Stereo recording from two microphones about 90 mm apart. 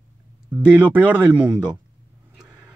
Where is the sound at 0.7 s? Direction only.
15° right (ahead or behind).